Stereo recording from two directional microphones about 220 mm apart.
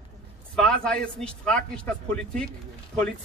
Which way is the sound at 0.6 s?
5° left (ahead or behind).